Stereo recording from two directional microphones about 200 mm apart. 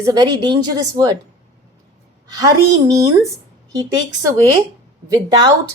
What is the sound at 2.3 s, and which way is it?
Speech, 20° right (ahead or behind).